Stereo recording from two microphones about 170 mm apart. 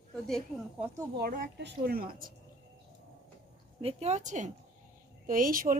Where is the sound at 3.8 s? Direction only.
40° right (ahead or behind).